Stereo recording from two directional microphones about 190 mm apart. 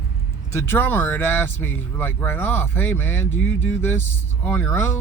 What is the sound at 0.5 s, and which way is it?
Speech, 10° left (ahead or behind).